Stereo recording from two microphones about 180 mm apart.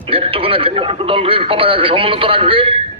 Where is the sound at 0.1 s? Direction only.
30° right (ahead or behind).